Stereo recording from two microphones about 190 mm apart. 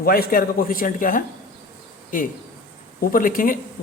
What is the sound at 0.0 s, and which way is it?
A man's voice, 50° left (ahead or behind).